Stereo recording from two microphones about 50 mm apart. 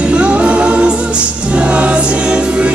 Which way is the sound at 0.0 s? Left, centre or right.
Right.